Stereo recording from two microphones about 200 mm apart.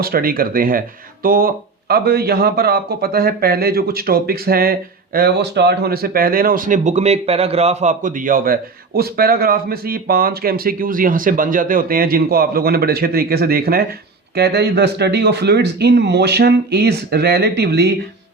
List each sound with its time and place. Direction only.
0.0 s speech: 50° right (ahead or behind)